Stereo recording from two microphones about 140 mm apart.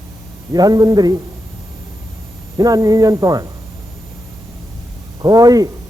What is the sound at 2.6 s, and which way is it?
Speech, 25° right (ahead or behind).